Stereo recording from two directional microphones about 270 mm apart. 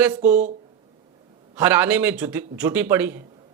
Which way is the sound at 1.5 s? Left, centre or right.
Centre.